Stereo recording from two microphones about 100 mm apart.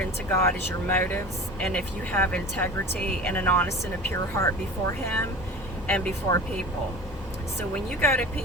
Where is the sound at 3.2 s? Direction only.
15° left (ahead or behind).